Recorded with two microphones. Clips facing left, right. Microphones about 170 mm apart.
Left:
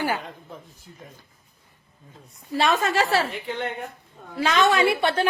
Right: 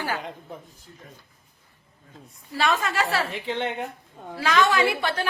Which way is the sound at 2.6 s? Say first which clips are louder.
Left 3 dB; 25° left (ahead or behind).